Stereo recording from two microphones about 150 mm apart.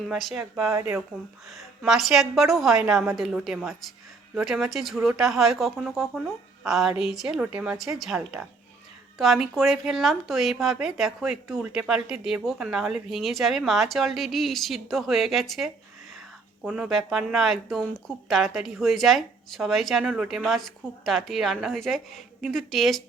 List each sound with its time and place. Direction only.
0.1 s speech: centre (ahead or behind)
0.7 s speech: 20° right (ahead or behind)
1.5 s speech: centre (ahead or behind)